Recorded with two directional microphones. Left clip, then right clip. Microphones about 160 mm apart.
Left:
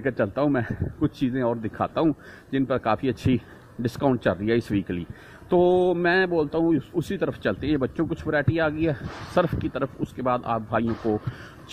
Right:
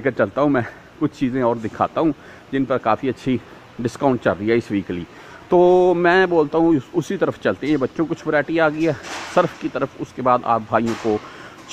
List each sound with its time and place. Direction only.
0.0 s a man's voice: 15° right (ahead or behind)
2.0 s a man's voice: 5° right (ahead or behind)